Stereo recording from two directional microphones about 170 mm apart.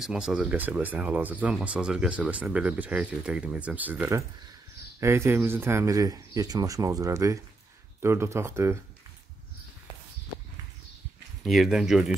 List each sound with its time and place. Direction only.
0.0 s speech: 5° right (ahead or behind)
11.4 s speech: centre (ahead or behind)